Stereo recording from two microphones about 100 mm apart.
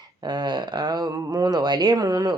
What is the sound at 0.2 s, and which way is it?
A woman's voice, 45° right (ahead or behind).